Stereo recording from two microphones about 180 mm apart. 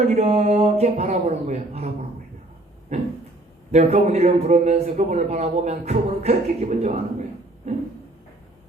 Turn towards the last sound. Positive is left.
turn(degrees=-40)  # may be behind; listen again after turning